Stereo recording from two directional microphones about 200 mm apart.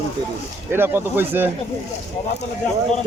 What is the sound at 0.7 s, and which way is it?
Speech, 10° right (ahead or behind).